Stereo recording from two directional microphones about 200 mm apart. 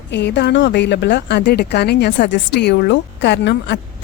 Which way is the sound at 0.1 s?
60° left (ahead or behind).